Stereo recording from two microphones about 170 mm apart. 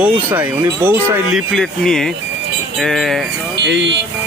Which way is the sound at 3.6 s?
90° right.